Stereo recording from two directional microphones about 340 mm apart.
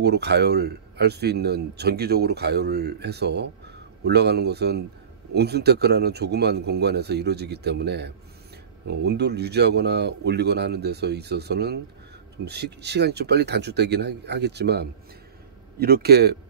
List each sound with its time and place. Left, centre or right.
0.0 s speech: right